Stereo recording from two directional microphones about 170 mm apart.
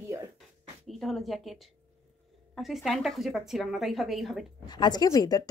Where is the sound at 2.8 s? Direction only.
Centre (ahead or behind).